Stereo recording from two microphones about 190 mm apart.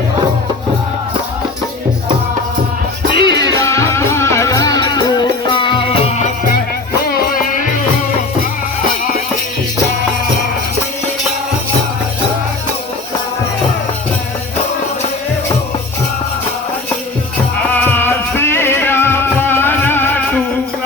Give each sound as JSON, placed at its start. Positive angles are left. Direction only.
{"t": 3.1, "sound": "music", "side_deg": 25}
{"t": 7.1, "sound": "music", "side_deg": 45}
{"t": 17.7, "sound": "music", "side_deg": 10}